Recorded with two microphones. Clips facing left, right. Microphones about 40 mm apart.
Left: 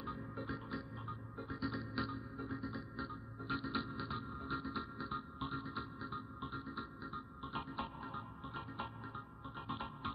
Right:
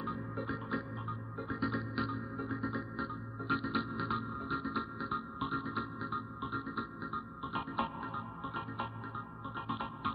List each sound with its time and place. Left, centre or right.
0.0 s music: centre